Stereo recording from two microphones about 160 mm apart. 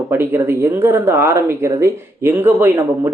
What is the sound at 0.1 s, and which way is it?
Speech, 15° right (ahead or behind).